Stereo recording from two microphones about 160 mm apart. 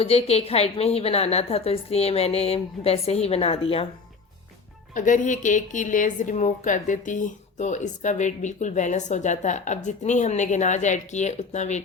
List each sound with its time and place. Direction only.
0.0 s a woman's voice: 40° left (ahead or behind)
4.9 s a woman's voice: 55° left (ahead or behind)